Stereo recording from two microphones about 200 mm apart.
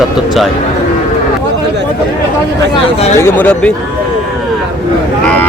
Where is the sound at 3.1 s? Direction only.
10° left (ahead or behind).